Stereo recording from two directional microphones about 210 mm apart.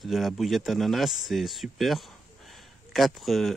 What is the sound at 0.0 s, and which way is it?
Speech, centre (ahead or behind).